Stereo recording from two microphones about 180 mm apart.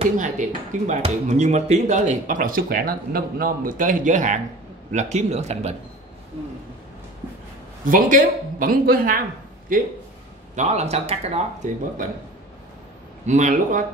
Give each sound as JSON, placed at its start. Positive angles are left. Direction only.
{"t": 0.2, "sound": "speech", "side_deg": -45}
{"t": 7.8, "sound": "speech", "side_deg": -45}
{"t": 10.5, "sound": "speech", "side_deg": -40}
{"t": 13.2, "sound": "speech", "side_deg": -40}